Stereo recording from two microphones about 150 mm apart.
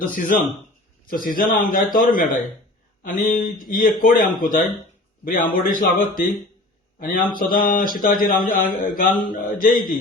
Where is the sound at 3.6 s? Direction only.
70° left (ahead or behind).